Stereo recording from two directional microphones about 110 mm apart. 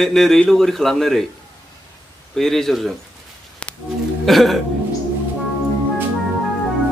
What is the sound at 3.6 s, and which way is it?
Music, 10° left (ahead or behind).